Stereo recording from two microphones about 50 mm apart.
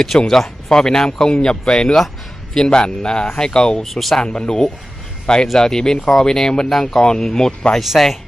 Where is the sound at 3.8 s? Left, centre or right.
Centre.